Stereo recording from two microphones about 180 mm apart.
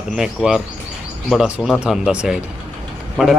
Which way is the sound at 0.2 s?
5° right (ahead or behind).